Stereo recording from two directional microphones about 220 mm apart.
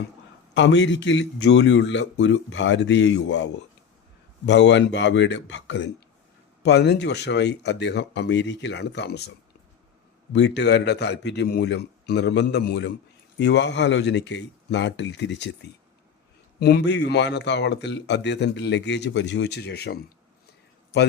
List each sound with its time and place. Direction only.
0.5 s a man's voice: 55° left (ahead or behind)
4.4 s a man's voice: 55° left (ahead or behind)
10.3 s a man's voice: 50° left (ahead or behind)
16.6 s a man's voice: 50° left (ahead or behind)